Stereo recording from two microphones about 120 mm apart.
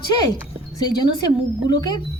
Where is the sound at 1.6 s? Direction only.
35° left (ahead or behind).